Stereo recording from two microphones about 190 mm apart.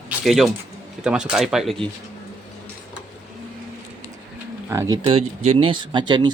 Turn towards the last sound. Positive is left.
turn(degrees=-25)  # may be behind; listen again after turning